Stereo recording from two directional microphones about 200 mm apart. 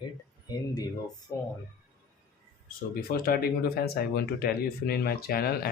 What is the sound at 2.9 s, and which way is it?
Speech, 50° left (ahead or behind).